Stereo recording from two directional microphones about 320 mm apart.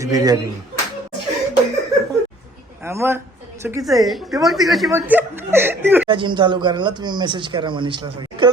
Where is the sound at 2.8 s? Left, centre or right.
Centre.